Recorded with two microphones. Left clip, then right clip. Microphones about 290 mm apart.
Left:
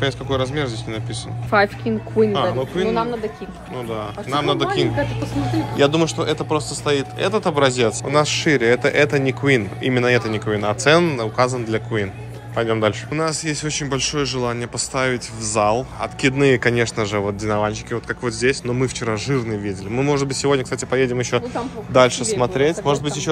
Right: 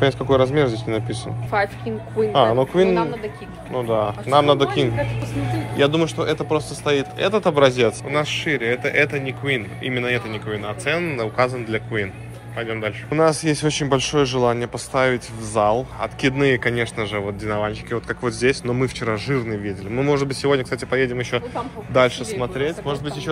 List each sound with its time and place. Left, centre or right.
0.0 s speech: centre
1.5 s speech: left
2.3 s speech: centre
3.7 s speech: centre
13.1 s speech: centre